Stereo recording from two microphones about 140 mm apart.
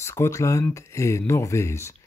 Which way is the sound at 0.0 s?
20° left (ahead or behind).